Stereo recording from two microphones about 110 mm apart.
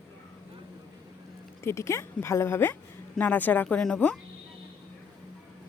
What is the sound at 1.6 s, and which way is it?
Speech, 25° left (ahead or behind).